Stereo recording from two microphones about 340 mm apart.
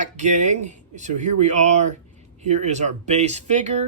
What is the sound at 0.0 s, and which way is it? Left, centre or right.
Speech, right.